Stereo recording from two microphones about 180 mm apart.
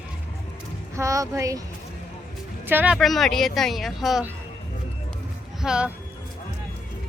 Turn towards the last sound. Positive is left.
turn(degrees=-5)  # may be behind; listen again after turning